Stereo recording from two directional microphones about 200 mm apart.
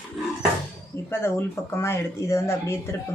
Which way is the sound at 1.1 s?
10° left (ahead or behind).